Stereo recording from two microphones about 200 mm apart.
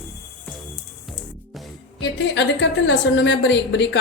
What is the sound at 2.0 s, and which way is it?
A woman's voice, 65° left (ahead or behind).